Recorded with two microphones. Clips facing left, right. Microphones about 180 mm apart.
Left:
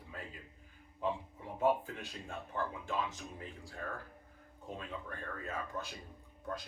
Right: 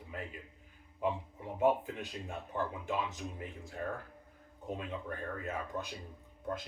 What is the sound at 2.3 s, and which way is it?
Speech, 15° right (ahead or behind).